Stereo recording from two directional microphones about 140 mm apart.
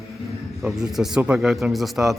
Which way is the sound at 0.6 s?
5° right (ahead or behind).